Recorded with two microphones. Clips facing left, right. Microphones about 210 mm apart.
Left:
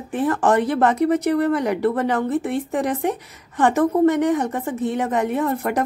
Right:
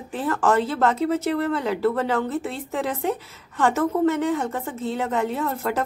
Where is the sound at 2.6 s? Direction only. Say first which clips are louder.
Left 3 dB; 15° left (ahead or behind).